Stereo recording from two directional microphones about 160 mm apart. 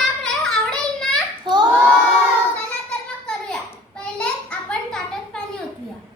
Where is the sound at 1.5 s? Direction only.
30° right (ahead or behind).